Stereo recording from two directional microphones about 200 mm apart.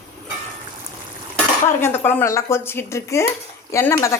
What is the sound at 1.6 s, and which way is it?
A woman's voice, 10° left (ahead or behind).